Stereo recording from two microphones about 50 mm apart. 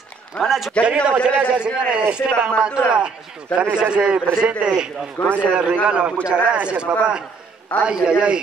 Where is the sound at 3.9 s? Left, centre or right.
Right.